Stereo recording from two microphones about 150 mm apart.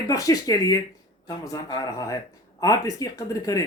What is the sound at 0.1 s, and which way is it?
Speech, 25° left (ahead or behind).